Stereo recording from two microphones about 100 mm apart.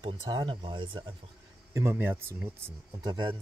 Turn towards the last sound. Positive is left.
turn(degrees=-50)  # may be behind; listen again after turning